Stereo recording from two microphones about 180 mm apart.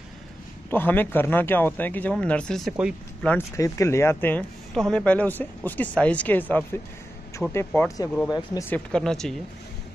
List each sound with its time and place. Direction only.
0.7 s speech: 10° left (ahead or behind)
3.3 s speech: 15° left (ahead or behind)
8.3 s speech: 20° left (ahead or behind)
8.6 s speech: 5° left (ahead or behind)